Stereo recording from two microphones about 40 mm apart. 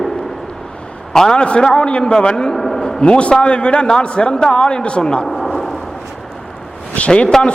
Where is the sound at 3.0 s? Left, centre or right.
Left.